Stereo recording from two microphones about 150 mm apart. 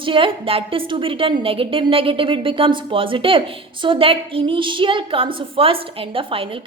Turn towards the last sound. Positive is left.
turn(degrees=-35)  # may be behind; listen again after turning